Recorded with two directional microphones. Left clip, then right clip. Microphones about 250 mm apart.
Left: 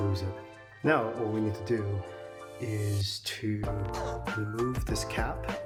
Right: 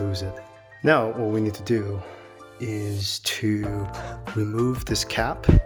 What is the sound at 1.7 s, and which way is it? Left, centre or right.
Speech, right.